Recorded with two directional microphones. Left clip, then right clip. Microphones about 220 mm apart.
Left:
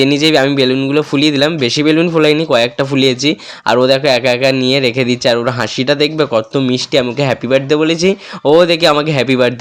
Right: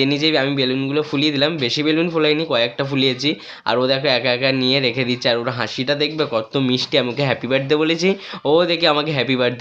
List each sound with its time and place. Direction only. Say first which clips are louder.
0.0 s speech: left 7 dB; 35° left (ahead or behind)